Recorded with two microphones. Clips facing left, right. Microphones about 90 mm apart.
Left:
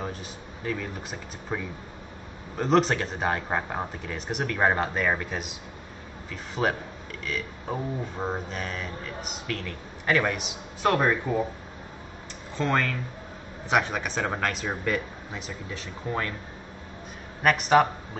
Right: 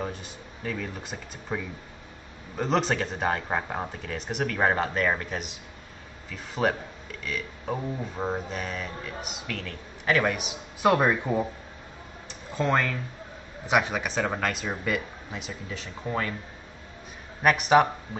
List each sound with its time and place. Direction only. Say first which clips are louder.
1.5 s speech: even; 5° right (ahead or behind)
12.5 s speech: right 1 dB; 5° right (ahead or behind)
17.4 s speech: even; 5° right (ahead or behind)